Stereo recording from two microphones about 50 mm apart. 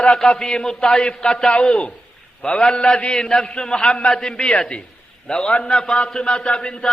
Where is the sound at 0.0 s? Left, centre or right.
Centre.